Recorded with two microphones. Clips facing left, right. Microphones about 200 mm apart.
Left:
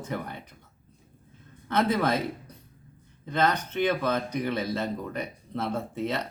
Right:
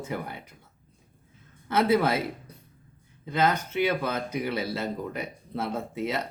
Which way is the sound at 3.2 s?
10° right (ahead or behind).